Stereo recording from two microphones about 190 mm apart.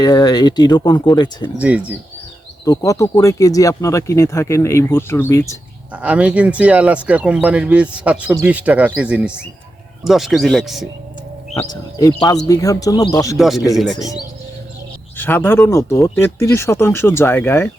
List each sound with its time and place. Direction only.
0.0 s speech: 20° left (ahead or behind)
1.5 s speech: 10° right (ahead or behind)
2.6 s speech: 15° left (ahead or behind)
5.9 s speech: 5° right (ahead or behind)
11.7 s speech: 20° left (ahead or behind)
13.3 s speech: centre (ahead or behind)
15.2 s speech: 10° left (ahead or behind)